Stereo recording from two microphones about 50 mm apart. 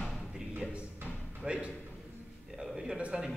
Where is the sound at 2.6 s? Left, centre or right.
Centre.